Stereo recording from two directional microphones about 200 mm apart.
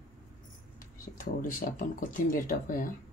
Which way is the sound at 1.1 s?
45° left (ahead or behind).